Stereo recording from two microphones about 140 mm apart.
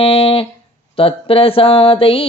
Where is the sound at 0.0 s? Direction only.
40° left (ahead or behind).